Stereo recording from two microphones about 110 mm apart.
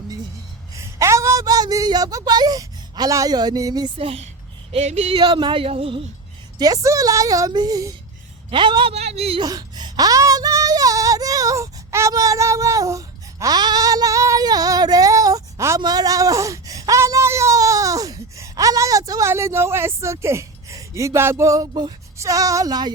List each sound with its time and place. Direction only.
0.8 s a woman's voice: 25° right (ahead or behind)
3.9 s a woman's voice: 60° right (ahead or behind)
4.7 s speech: 80° right
5.2 s speech: 45° right (ahead or behind)
6.6 s a woman's voice: 30° right (ahead or behind)
8.4 s speech: 45° right (ahead or behind)
8.9 s speech: 70° right (ahead or behind)
9.4 s child singing: 40° right (ahead or behind)
15.8 s a sound: 35° right (ahead or behind)
19.3 s a woman's voice: 25° right (ahead or behind)